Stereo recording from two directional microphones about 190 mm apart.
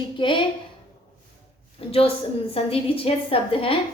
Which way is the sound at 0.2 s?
25° left (ahead or behind).